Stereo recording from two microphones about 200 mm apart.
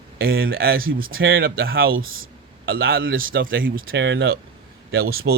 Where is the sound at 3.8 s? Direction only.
60° right (ahead or behind).